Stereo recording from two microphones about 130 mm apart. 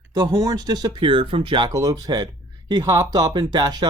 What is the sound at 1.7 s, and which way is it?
Speech, 25° right (ahead or behind).